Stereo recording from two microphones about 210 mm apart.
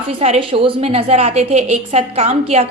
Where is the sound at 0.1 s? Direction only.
25° right (ahead or behind).